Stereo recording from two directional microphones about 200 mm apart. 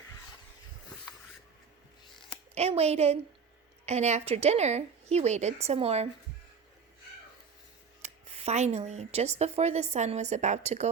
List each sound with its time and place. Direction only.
2.6 s speech: 30° right (ahead or behind)
8.0 s speech: 35° right (ahead or behind)